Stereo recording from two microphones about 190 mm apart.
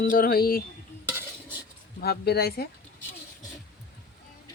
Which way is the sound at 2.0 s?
55° left (ahead or behind).